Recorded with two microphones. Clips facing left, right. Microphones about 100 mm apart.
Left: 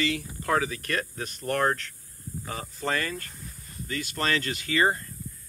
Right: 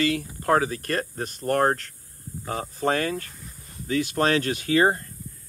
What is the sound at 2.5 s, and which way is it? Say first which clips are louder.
Speech: right 6 dB; 60° right (ahead or behind).